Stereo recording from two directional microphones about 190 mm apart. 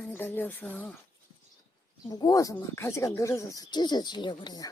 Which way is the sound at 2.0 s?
20° left (ahead or behind).